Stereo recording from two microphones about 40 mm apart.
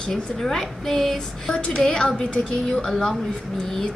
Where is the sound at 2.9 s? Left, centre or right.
Centre.